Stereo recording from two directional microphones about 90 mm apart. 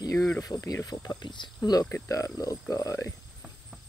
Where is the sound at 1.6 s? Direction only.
45° left (ahead or behind).